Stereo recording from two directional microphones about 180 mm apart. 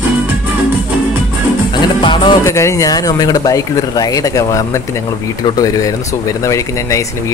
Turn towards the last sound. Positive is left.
turn(degrees=15)  # may be behind; listen again after turning